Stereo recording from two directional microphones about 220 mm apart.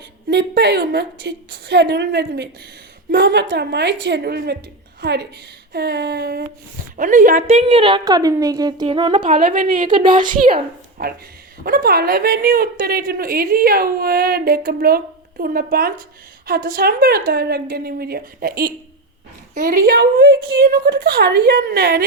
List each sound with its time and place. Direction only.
0.3 s a woman's voice: 50° right (ahead or behind)
6.9 s a woman's voice: 35° right (ahead or behind); by 9.1 s 20° right (ahead or behind)
9.1 s a woman's voice: 40° right (ahead or behind)
9.8 s a woman's voice: 20° right (ahead or behind)
11.6 s speech: 45° right (ahead or behind)